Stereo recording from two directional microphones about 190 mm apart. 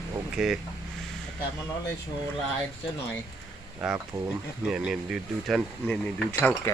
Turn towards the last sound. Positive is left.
turn(degrees=10)  # may be behind; listen again after turning